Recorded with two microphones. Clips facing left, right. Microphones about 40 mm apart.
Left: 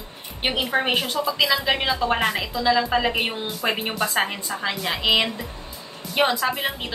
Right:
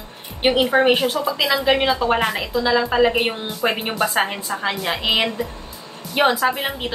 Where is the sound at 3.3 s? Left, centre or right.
Right.